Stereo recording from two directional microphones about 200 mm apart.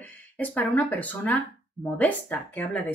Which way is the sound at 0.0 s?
10° left (ahead or behind).